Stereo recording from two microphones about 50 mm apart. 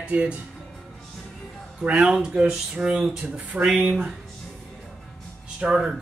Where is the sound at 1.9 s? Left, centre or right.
Centre.